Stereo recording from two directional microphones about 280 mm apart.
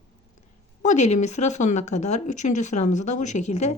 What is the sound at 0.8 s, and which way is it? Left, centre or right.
Speech, left.